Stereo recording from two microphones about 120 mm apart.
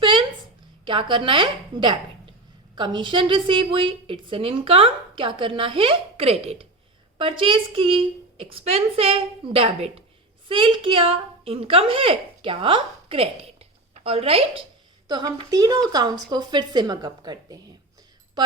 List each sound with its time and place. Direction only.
0.0 s a sound: 45° right (ahead or behind)
0.9 s a woman's voice: 45° right (ahead or behind)
15.0 s speech: 35° right (ahead or behind)